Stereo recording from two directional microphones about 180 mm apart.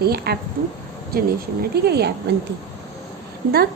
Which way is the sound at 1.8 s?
65° right (ahead or behind).